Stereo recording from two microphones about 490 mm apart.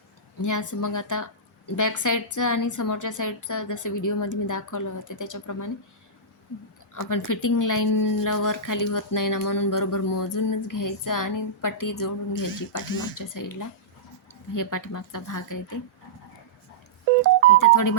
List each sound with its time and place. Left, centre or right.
0.4 s a woman's voice: left
6.9 s a woman's voice: left
17.6 s a woman's voice: left